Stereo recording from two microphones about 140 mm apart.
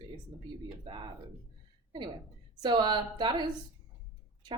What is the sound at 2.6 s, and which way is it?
Speech, 35° right (ahead or behind).